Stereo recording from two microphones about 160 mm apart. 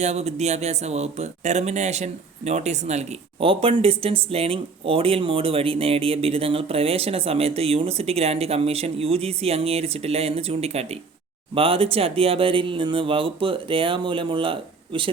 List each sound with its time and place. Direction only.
0.0 s speech: 45° right (ahead or behind)